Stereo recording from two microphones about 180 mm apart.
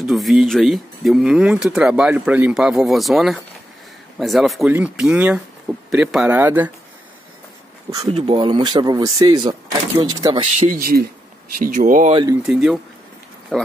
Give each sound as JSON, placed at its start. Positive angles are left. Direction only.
{"t": 0.0, "sound": "speech", "side_deg": 0}
{"t": 8.1, "sound": "speech", "side_deg": -30}
{"t": 10.4, "sound": "speech", "side_deg": -50}
{"t": 12.4, "sound": "speech", "side_deg": -5}